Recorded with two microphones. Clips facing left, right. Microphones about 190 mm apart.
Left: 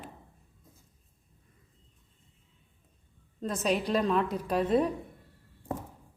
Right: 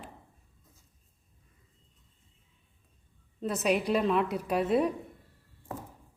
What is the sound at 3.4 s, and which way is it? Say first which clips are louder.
A woman's voice: right 1 dB; 10° right (ahead or behind).